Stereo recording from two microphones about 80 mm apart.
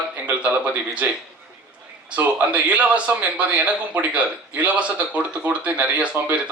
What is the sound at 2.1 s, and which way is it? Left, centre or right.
A man's voice, centre.